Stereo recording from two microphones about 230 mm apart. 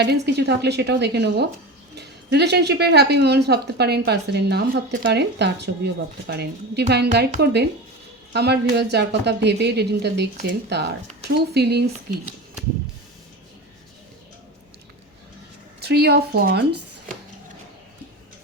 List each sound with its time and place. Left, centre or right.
0.0 s speech: right
15.8 s speech: right